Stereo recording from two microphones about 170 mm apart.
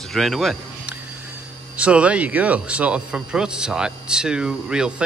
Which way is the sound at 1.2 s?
10° right (ahead or behind).